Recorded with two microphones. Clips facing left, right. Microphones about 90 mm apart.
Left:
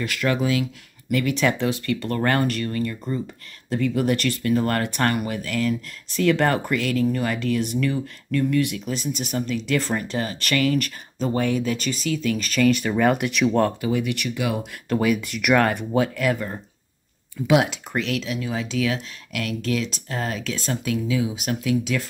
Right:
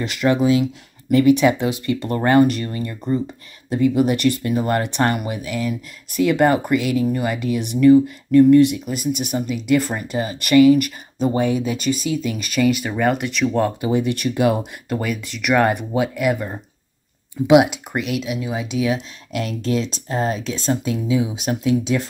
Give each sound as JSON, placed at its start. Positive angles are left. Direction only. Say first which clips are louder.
{"t": 0.0, "sound": "speech", "louder": "right 5 dB", "side_deg": -20}
{"t": 8.8, "sound": "speech", "louder": "right 4 dB", "side_deg": -10}
{"t": 13.7, "sound": "speech", "louder": "right 4 dB", "side_deg": -25}
{"t": 14.9, "sound": "speech", "louder": "left 4 dB", "side_deg": 0}
{"t": 15.6, "sound": "speech", "louder": "right 2 dB", "side_deg": -15}